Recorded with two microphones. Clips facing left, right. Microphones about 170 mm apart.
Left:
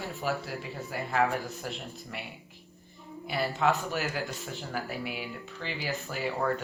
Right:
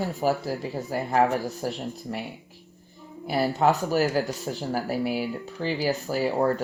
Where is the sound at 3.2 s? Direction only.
40° right (ahead or behind).